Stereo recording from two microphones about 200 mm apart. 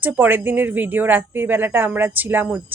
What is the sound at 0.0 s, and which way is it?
Speech, 10° right (ahead or behind).